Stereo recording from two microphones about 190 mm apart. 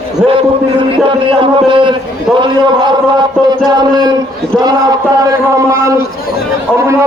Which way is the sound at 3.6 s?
20° right (ahead or behind).